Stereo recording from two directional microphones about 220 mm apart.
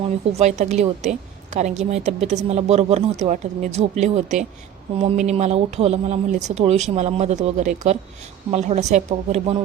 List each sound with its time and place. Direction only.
0.3 s speech: 30° right (ahead or behind)